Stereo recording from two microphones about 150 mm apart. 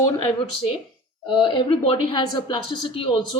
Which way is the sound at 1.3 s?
30° left (ahead or behind).